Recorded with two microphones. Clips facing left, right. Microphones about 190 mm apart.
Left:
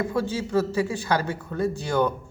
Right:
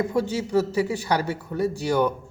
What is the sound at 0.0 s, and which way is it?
Speech, 15° right (ahead or behind).